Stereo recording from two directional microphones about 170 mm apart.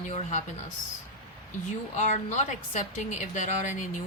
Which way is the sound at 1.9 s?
45° left (ahead or behind).